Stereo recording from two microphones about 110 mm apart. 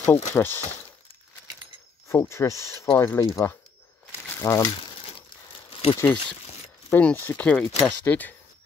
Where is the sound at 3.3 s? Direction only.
20° left (ahead or behind).